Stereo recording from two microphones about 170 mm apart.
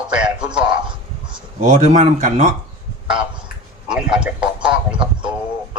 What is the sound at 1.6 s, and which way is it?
Speech, 45° right (ahead or behind).